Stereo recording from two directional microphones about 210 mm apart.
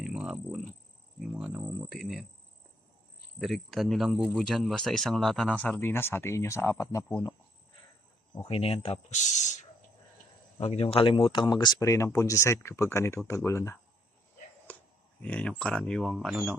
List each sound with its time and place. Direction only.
0.0 s a sound: 5° right (ahead or behind)
1.2 s speech: centre (ahead or behind)
3.3 s speech: centre (ahead or behind)
8.4 s speech: 25° left (ahead or behind)
10.6 s speech: 30° left (ahead or behind); by 13.7 s 15° left (ahead or behind)
14.7 s a sound: 10° left (ahead or behind)
15.2 s speech: 5° left (ahead or behind)